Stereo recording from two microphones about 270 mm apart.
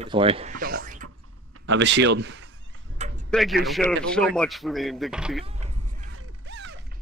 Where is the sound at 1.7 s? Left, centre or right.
Right.